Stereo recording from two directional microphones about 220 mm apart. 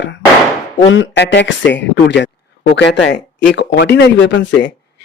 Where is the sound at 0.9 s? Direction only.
55° left (ahead or behind).